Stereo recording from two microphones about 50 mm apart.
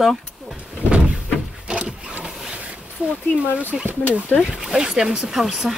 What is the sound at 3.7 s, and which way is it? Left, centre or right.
Speech, centre.